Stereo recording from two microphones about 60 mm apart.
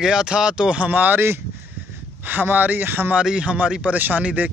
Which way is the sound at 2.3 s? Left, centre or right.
Right.